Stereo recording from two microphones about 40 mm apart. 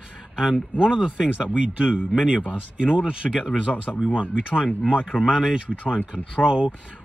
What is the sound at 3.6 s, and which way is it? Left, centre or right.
Speech, left.